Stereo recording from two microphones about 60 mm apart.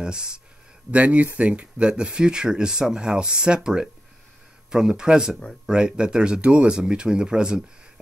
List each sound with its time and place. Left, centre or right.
0.0 s speech: centre
0.9 s speech: right